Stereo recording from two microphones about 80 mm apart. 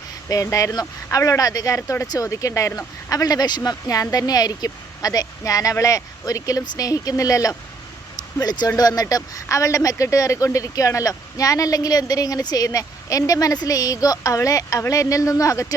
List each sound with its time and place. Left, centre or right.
0.3 s speech: left
1.2 s speech: left